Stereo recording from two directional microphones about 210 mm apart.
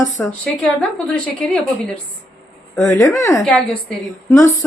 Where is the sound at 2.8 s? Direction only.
15° left (ahead or behind).